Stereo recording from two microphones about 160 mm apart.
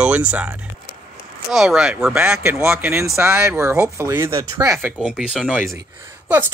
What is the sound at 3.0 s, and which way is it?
Speech, 15° right (ahead or behind).